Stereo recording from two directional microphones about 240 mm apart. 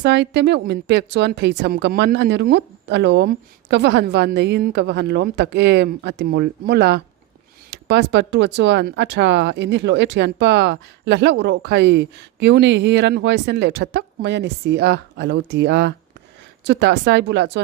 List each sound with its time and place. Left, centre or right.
0.0 s speech: right